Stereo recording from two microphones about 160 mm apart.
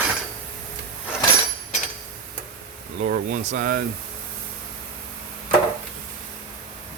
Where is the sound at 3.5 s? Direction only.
65° right (ahead or behind).